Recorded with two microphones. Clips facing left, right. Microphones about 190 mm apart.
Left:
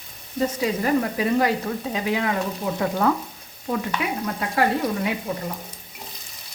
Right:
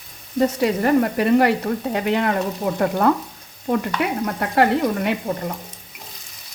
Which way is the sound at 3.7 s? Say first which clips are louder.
Right 4 dB; 55° right (ahead or behind).